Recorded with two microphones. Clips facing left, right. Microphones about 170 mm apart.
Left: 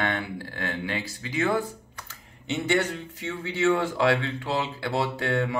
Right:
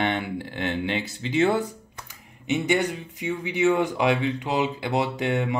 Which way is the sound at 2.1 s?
15° right (ahead or behind).